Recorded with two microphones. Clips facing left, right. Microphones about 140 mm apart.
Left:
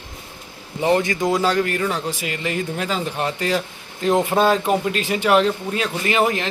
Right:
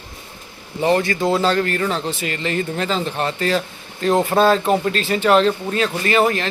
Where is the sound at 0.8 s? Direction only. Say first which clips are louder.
Right 1 dB; 15° left (ahead or behind).